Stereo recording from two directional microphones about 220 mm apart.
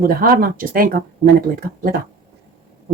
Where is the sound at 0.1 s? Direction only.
40° right (ahead or behind).